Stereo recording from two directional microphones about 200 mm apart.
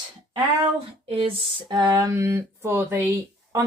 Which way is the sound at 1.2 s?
25° right (ahead or behind).